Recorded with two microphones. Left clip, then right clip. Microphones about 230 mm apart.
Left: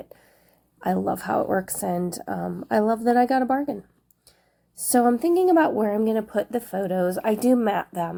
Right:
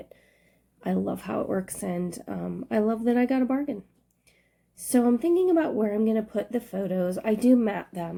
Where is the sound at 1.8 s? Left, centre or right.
Left.